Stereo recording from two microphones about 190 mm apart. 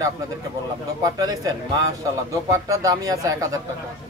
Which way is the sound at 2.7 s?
20° right (ahead or behind).